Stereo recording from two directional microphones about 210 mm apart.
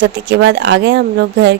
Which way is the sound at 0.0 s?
55° right (ahead or behind).